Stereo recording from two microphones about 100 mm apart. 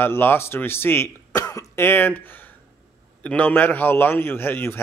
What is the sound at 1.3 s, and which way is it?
A man's voice, 35° left (ahead or behind).